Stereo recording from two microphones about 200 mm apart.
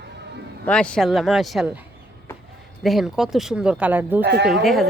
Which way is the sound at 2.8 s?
Centre (ahead or behind).